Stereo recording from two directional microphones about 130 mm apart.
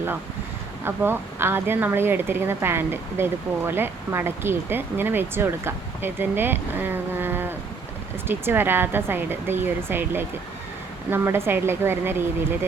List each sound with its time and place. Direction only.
0.9 s speech: 15° right (ahead or behind)